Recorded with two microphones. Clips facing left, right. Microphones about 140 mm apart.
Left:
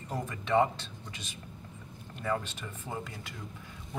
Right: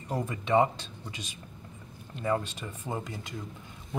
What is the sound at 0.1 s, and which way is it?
A man's voice, 15° right (ahead or behind).